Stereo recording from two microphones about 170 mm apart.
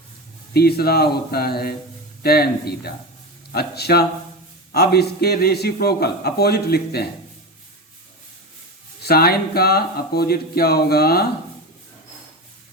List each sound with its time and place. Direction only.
0.5 s a man's voice: 70° left (ahead or behind)
9.0 s speech: 65° left (ahead or behind)